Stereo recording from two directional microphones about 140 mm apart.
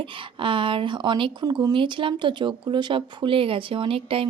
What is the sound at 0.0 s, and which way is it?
A woman's voice, 40° right (ahead or behind).